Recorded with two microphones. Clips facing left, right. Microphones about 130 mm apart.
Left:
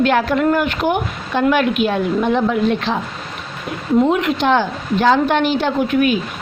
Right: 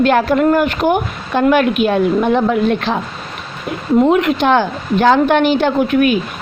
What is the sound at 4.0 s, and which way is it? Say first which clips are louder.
A woman's voice: right 4 dB; 55° right (ahead or behind).